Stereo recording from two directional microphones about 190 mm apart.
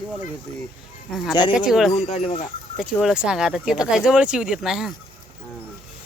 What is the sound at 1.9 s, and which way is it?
Speech, 35° left (ahead or behind).